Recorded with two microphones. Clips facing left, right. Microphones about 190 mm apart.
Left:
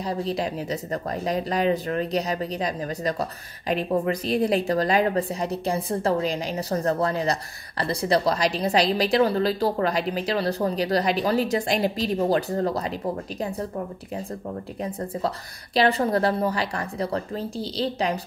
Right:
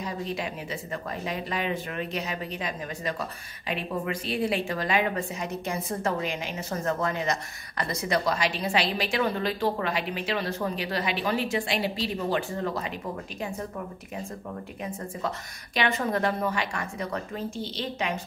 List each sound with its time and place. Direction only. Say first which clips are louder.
0.0 s speech: left 5 dB; 35° left (ahead or behind)
14.8 s speech: left 6 dB; 35° left (ahead or behind)